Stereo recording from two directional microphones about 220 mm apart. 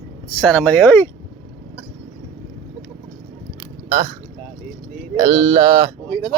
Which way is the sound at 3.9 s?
25° right (ahead or behind).